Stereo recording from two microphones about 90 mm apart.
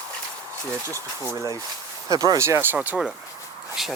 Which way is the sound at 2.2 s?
35° right (ahead or behind).